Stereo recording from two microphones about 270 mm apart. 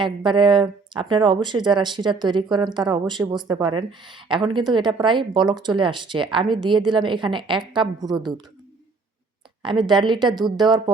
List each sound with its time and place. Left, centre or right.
0.0 s speech: centre
9.6 s speech: centre